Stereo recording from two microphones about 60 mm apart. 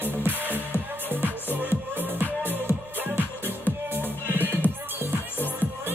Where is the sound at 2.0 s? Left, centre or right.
Right.